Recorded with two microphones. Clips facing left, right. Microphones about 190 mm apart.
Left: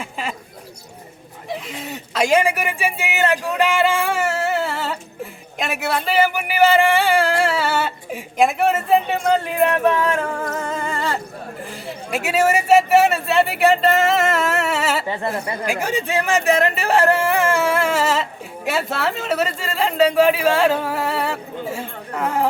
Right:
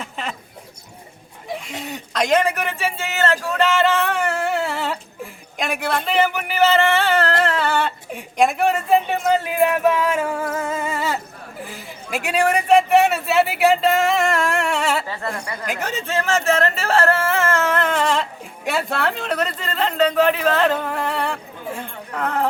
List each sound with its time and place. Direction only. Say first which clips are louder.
0.0 s a sound: left 2 dB; 5° left (ahead or behind)
1.5 s speech: even; centre (ahead or behind)
15.0 s speech: left 4 dB; 20° left (ahead or behind)
15.6 s speech: left 3 dB; 10° left (ahead or behind)